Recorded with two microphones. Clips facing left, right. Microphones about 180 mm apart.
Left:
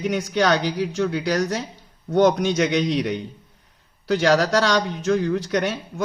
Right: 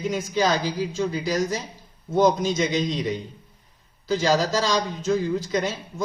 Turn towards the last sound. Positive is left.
turn(degrees=70)  # may be behind; listen again after turning